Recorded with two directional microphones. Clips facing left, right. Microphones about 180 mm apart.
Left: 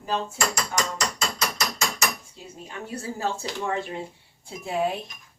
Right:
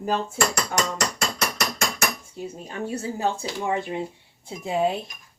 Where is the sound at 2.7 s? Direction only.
25° right (ahead or behind).